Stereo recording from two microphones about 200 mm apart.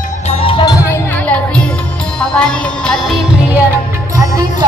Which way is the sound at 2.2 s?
5° left (ahead or behind).